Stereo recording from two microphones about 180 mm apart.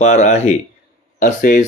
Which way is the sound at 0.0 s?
40° left (ahead or behind).